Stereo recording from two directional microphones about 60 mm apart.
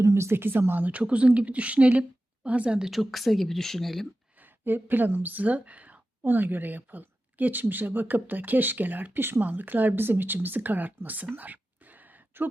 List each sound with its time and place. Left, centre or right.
0.0 s a woman's voice: right; by 2.9 s centre
2.9 s speech: centre
4.6 s a woman's voice: right
11.3 s whispering: right